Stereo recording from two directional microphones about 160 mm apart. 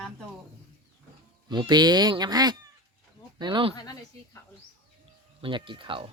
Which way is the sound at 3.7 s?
25° left (ahead or behind).